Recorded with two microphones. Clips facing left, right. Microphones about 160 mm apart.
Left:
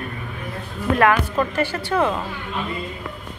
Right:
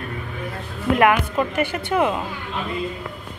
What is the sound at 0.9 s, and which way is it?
A woman's voice, 15° right (ahead or behind).